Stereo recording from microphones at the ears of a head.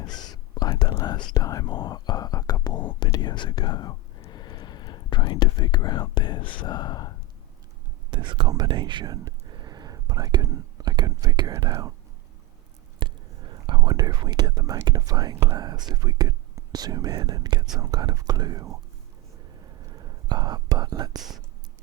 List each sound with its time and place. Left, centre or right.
0.0 s whispering: left
8.1 s speech: right
13.0 s speech: right
19.5 s whispering: right